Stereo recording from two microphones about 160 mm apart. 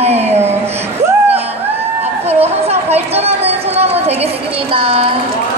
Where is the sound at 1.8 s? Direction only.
40° right (ahead or behind).